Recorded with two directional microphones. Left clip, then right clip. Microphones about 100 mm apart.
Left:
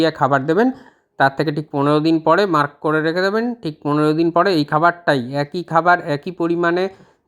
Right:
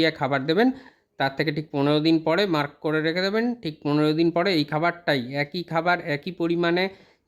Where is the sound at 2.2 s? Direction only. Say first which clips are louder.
Left 8 dB; 20° left (ahead or behind).